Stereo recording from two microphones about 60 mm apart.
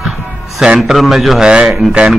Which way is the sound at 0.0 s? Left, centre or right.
Centre.